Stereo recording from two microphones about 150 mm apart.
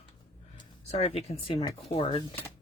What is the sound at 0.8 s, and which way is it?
Speech, 45° left (ahead or behind).